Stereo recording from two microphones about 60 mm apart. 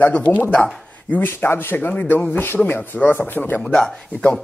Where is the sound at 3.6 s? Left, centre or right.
Centre.